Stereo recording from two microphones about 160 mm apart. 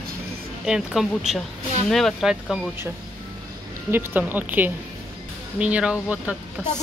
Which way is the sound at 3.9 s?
10° right (ahead or behind).